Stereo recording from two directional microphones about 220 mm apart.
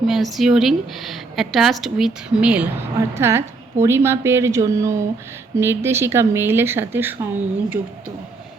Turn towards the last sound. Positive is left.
turn(degrees=-10)  # may be behind; listen again after turning